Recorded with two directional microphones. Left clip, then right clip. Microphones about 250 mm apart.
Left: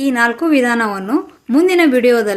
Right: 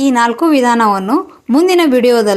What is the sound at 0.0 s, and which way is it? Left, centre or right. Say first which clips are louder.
A woman's voice: right 3 dB; centre.